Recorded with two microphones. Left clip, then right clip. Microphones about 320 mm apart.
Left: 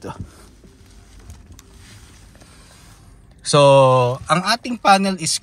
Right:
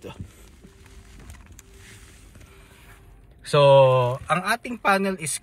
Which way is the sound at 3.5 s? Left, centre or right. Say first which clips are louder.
Left 4 dB; centre.